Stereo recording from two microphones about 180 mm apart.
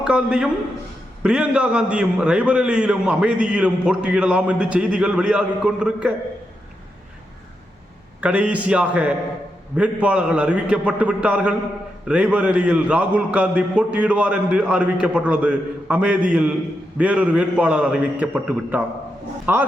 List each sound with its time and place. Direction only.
0.0 s a man's voice: 5° right (ahead or behind)
8.2 s a man's voice: 5° right (ahead or behind)